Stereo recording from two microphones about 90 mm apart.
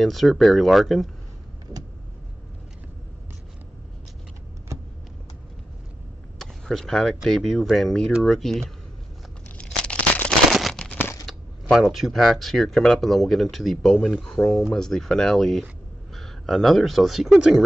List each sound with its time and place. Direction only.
0.0 s speech: centre (ahead or behind)
6.3 s a sound: 5° left (ahead or behind)
7.2 s speech: 5° left (ahead or behind)
9.6 s tearing: 10° left (ahead or behind)
10.5 s a sound: 5° left (ahead or behind)
11.8 s speech: centre (ahead or behind)